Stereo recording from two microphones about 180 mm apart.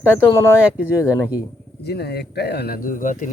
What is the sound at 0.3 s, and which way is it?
Speech, 15° left (ahead or behind).